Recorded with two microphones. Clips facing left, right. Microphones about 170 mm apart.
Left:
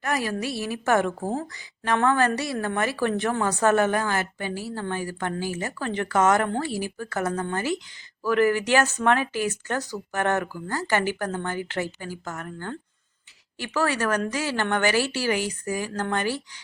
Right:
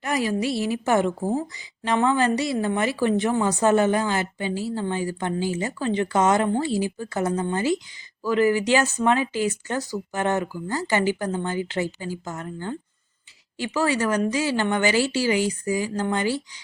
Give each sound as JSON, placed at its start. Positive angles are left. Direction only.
{"t": 0.6, "sound": "speech", "side_deg": -15}